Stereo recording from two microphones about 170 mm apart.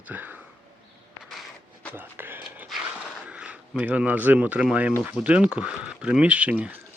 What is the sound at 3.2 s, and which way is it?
Speech, 5° right (ahead or behind).